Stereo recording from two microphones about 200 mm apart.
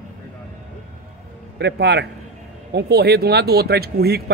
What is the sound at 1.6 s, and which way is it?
A man's voice, 60° right (ahead or behind).